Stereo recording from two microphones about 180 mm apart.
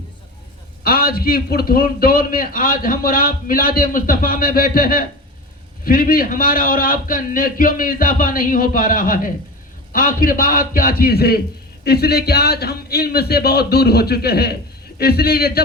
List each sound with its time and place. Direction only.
0.9 s a man's voice: 55° left (ahead or behind)